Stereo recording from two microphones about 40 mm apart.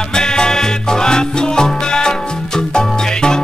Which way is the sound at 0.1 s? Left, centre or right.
Centre.